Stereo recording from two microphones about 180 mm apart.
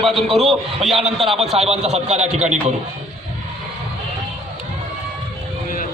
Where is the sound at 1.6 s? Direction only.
35° right (ahead or behind).